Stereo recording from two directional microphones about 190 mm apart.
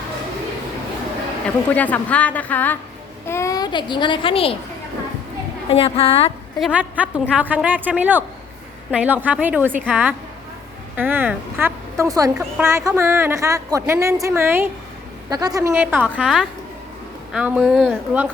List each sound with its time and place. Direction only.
1.7 s a woman's voice: 10° left (ahead or behind); by 4.5 s 30° left (ahead or behind)
5.7 s a woman's voice: 30° left (ahead or behind)
6.6 s a woman's voice: 5° right (ahead or behind)